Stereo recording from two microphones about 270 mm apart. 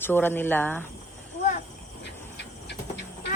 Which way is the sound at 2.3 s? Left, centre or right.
Left.